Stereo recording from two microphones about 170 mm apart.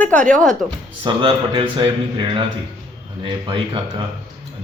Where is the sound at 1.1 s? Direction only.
30° right (ahead or behind).